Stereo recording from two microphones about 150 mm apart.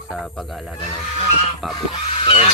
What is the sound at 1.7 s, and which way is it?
Goose, 35° left (ahead or behind).